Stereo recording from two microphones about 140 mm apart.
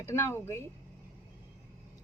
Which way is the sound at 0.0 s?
20° left (ahead or behind).